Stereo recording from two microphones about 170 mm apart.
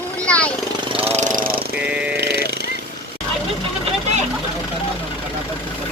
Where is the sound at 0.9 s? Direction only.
40° right (ahead or behind); by 1.6 s 55° right (ahead or behind).